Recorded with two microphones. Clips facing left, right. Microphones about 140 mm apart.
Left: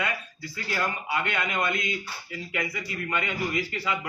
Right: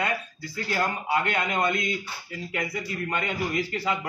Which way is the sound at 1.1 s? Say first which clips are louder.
Right 4 dB; 40° right (ahead or behind).